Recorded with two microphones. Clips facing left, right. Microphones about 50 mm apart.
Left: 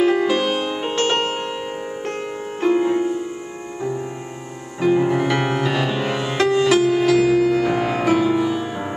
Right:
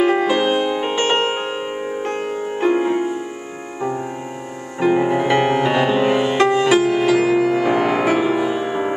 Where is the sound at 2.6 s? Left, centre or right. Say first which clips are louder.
Even; right.